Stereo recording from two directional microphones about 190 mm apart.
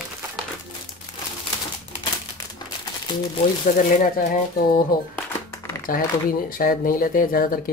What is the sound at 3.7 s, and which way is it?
Speech, 50° left (ahead or behind).